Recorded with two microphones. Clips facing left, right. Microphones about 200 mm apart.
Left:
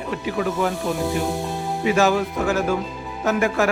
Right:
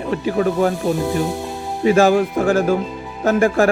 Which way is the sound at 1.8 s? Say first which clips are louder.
Right 6 dB; 50° right (ahead or behind).